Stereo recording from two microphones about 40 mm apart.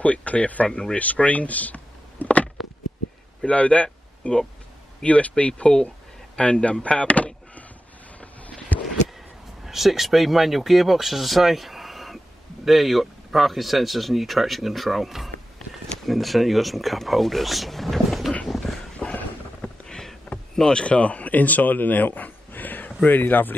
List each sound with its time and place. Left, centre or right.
0.0 s speech: left
0.7 s speech: centre
0.9 s a sound: left
3.4 s speech: left
5.6 s speech: left
8.2 s a sound: left
9.7 s speech: centre
19.0 s clip-clop: left
19.6 s a sound: left
20.7 s speech: left